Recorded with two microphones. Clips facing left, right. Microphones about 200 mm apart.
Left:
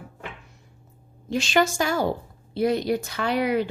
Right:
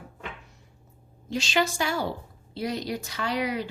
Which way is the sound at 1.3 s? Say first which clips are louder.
Left 4 dB; 55° left (ahead or behind).